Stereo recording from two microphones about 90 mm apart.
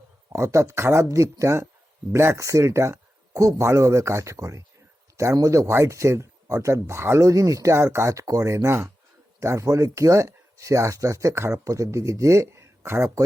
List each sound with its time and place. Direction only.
0.3 s speech: 30° right (ahead or behind)